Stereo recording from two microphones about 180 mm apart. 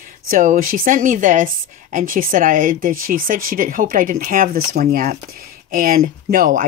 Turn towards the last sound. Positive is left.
turn(degrees=-50)  # may be behind; listen again after turning